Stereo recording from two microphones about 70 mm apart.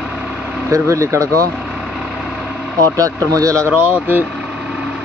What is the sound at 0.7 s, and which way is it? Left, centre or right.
Speech, right.